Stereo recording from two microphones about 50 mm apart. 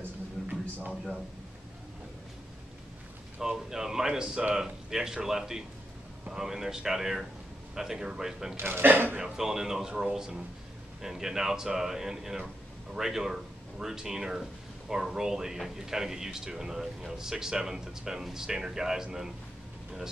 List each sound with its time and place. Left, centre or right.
3.3 s speech: centre
8.5 s speech: right
9.2 s speech: centre